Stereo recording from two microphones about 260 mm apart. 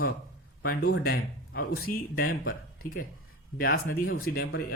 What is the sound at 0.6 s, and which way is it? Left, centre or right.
Speech, left.